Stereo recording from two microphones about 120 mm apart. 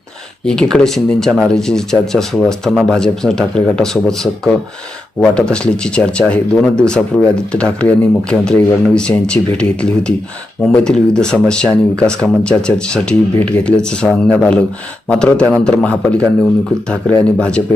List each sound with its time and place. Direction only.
0.4 s speech: 5° left (ahead or behind)